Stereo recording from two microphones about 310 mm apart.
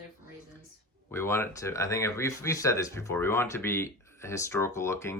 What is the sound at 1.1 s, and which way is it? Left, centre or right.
Speech, centre.